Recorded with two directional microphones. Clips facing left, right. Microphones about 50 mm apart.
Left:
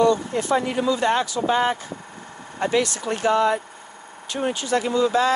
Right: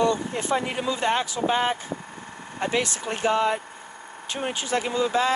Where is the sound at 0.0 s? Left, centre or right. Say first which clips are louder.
Left 4 dB; right.